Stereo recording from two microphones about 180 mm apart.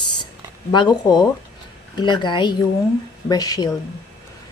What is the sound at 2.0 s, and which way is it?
Speech, 25° left (ahead or behind).